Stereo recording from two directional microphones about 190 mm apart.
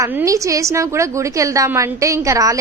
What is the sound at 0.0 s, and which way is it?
A woman's voice, 15° right (ahead or behind).